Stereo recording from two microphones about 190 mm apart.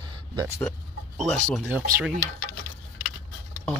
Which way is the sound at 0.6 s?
5° left (ahead or behind).